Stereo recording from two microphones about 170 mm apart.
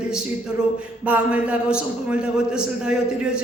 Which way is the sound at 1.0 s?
10° right (ahead or behind).